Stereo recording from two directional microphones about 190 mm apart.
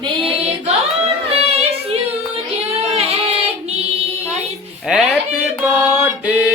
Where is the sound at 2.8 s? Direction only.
35° right (ahead or behind).